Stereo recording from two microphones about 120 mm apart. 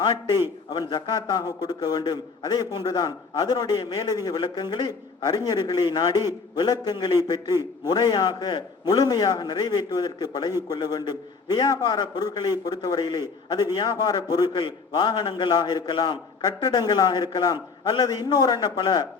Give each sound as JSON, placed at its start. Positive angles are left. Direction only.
{"t": 0.0, "sound": "a man's voice", "side_deg": 40}